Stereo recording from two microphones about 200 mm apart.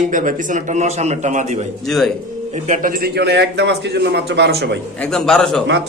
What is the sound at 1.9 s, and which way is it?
Speech, centre (ahead or behind).